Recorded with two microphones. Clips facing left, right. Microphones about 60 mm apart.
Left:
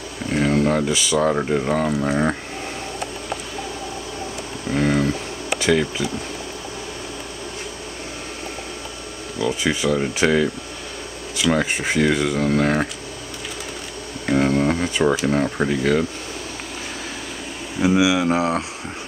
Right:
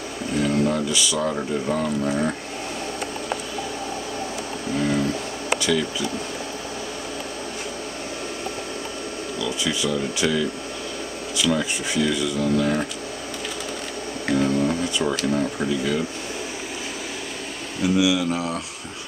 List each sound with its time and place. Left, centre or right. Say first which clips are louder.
0.3 s speech: left 3 dB; left
4.7 s a sound: left 4 dB; left
5.6 s speech: left 7 dB; left
9.4 s speech: left 5 dB; left
11.5 s speech: left 3 dB; left
14.4 s a sound: left 3 dB; left
15.6 s speech: left 4 dB; left
17.8 s speech: left 3 dB; left